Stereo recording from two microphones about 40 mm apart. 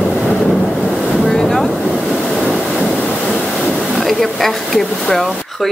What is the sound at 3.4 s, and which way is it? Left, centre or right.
Waves, centre.